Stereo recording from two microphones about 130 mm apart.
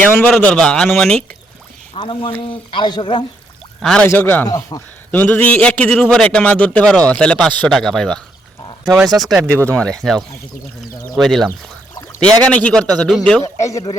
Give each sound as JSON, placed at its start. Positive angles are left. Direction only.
{"t": 0.0, "sound": "a man's voice", "side_deg": 15}
{"t": 2.0, "sound": "speech", "side_deg": 40}
{"t": 3.8, "sound": "a man's voice", "side_deg": 5}
{"t": 4.4, "sound": "a man's voice", "side_deg": 30}
{"t": 5.1, "sound": "a man's voice", "side_deg": 15}
{"t": 9.5, "sound": "speech", "side_deg": -20}
{"t": 10.0, "sound": "a man's voice", "side_deg": 0}
{"t": 13.4, "sound": "a man's voice", "side_deg": 25}